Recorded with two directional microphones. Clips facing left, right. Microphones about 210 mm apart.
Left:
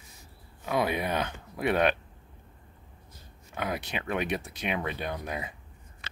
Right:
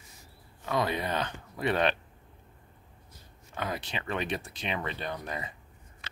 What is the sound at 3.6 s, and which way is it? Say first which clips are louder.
Speech: left 2 dB; 10° left (ahead or behind).